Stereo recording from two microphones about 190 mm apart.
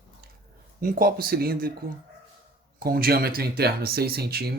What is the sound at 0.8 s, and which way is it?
Speech, 50° right (ahead or behind).